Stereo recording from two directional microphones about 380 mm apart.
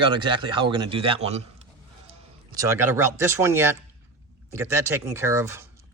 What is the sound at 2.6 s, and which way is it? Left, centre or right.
Speech, centre.